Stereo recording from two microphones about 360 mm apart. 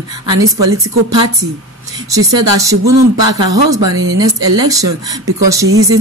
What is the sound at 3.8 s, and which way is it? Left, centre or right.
Speech, right.